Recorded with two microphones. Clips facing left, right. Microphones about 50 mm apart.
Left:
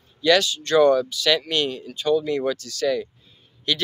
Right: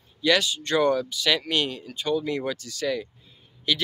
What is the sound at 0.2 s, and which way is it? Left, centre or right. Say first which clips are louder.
Speech: left 4 dB; centre.